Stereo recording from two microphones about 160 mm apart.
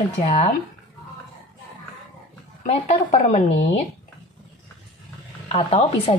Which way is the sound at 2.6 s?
45° left (ahead or behind).